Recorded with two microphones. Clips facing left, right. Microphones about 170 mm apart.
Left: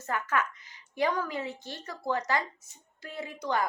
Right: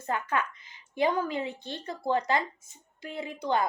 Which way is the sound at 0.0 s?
25° right (ahead or behind).